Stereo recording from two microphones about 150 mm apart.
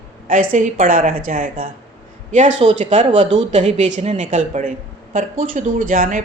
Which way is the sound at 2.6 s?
50° right (ahead or behind).